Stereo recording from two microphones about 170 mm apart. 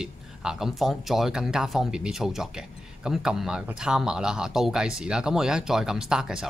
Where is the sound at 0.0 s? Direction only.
5° right (ahead or behind).